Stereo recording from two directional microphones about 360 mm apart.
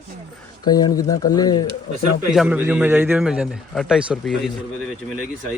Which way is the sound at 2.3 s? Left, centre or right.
Centre.